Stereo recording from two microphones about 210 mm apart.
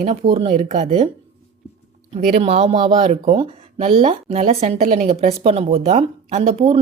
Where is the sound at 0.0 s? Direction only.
30° right (ahead or behind).